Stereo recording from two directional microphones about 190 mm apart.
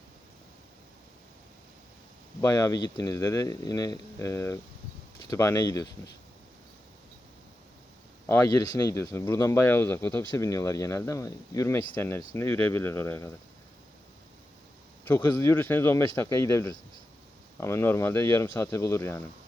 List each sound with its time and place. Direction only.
2.4 s speech: 15° left (ahead or behind)
8.3 s speech: 15° left (ahead or behind)
15.0 s speech: 10° left (ahead or behind)